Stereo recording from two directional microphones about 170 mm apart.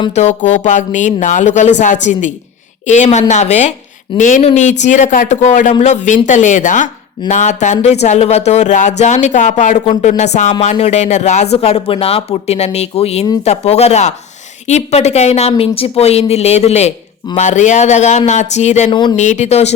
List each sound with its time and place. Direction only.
0.1 s a woman's voice: 40° left (ahead or behind)
18.9 s speech: 25° left (ahead or behind)
19.1 s speech: 45° left (ahead or behind)